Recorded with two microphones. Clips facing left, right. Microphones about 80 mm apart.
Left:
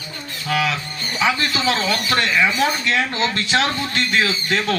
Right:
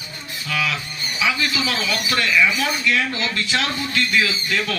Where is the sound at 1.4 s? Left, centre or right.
Left.